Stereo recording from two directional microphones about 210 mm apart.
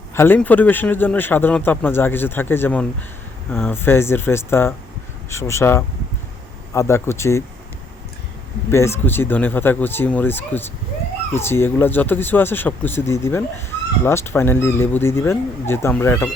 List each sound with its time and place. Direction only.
0.1 s a man's voice: 10° left (ahead or behind)
8.7 s a man's voice: 10° left (ahead or behind)